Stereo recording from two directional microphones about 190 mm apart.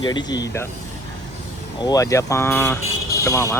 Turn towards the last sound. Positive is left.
turn(degrees=15)  # may be behind; listen again after turning